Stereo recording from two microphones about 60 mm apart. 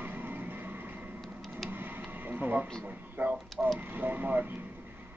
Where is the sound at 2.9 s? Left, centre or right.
Right.